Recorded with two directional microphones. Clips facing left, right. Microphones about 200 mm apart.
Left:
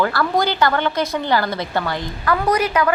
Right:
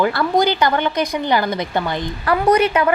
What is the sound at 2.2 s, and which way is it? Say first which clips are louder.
Speech: right 4 dB; 30° right (ahead or behind).